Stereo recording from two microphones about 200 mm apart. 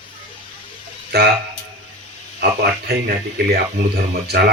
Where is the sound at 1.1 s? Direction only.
55° right (ahead or behind).